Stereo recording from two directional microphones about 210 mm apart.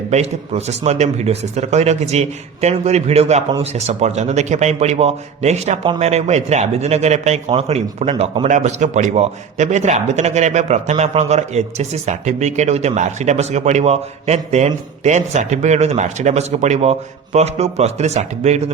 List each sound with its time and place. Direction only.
0.1 s a man's voice: 30° right (ahead or behind)
8.4 s a man's voice: 35° right (ahead or behind)